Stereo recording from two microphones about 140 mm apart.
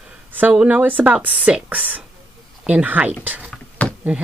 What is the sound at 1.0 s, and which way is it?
Speech, 10° right (ahead or behind).